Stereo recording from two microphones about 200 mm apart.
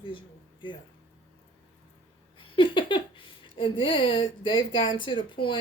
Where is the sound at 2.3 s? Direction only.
25° left (ahead or behind).